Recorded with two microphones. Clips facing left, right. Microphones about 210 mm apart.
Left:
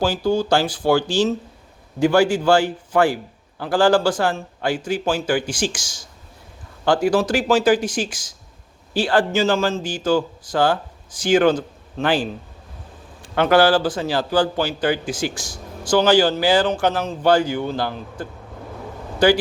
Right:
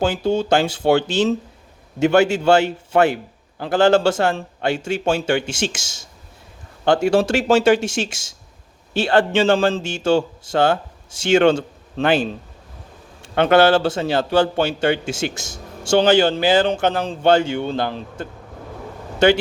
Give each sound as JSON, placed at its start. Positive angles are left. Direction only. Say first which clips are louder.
{"t": 0.0, "sound": "speech", "louder": "even", "side_deg": -25}